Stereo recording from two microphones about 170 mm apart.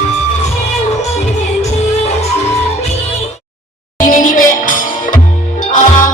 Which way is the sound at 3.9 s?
50° left (ahead or behind).